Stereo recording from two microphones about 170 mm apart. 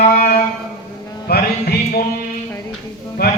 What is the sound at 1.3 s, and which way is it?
Music, 65° left (ahead or behind).